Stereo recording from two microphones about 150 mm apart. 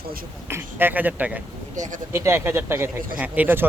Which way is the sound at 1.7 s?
55° right (ahead or behind).